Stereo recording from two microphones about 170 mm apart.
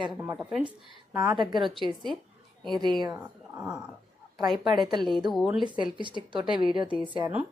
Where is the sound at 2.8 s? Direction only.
25° right (ahead or behind).